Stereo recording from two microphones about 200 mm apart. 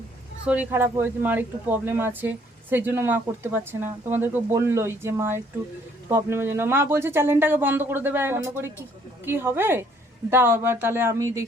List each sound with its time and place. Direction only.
0.4 s speech: 10° right (ahead or behind)